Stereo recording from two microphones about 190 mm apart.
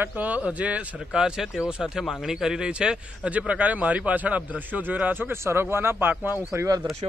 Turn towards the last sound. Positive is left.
turn(degrees=-15)  # may be behind; listen again after turning